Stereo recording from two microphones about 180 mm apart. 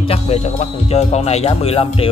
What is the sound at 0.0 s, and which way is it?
Speech, 35° left (ahead or behind).